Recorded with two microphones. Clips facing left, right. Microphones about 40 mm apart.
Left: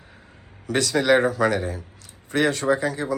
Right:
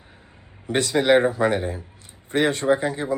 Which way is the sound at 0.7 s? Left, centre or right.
Right.